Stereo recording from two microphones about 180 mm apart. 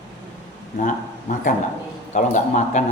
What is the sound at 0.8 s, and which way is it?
A man's voice, 45° left (ahead or behind).